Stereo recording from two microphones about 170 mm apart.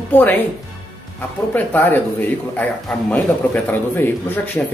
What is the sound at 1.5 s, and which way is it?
Speech, 10° left (ahead or behind).